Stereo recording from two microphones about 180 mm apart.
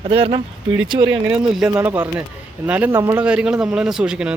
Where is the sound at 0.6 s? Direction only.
90° right.